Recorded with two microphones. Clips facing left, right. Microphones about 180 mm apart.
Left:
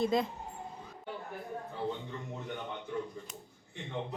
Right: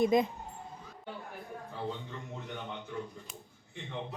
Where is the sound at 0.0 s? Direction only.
20° right (ahead or behind).